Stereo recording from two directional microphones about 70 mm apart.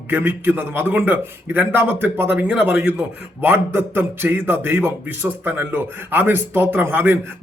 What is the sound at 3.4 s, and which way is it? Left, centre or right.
A man's voice, right.